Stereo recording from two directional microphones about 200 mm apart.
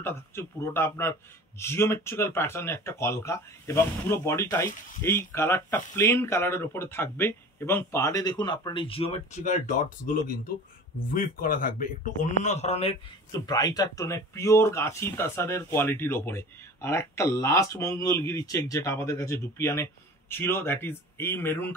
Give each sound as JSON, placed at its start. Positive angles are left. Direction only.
{"t": 0.0, "sound": "speech", "side_deg": 10}
{"t": 13.3, "sound": "speech", "side_deg": 20}